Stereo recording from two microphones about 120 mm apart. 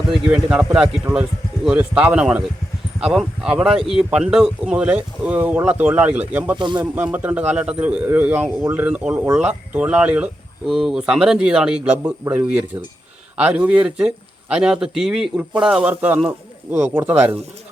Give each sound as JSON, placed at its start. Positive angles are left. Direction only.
{"t": 0.1, "sound": "speech", "side_deg": -5}
{"t": 6.6, "sound": "speech", "side_deg": -40}
{"t": 6.9, "sound": "speech", "side_deg": -15}